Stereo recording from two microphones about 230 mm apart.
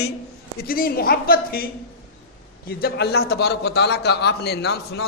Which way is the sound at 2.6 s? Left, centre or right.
Left.